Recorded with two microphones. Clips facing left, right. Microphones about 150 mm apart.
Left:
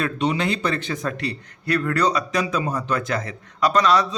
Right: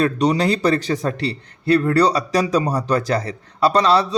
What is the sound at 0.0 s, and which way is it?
A man's voice, 40° right (ahead or behind).